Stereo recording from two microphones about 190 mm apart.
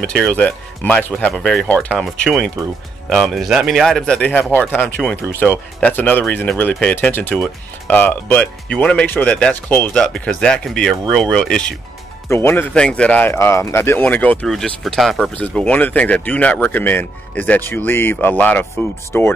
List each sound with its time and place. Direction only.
0.0 s speech: 5° left (ahead or behind)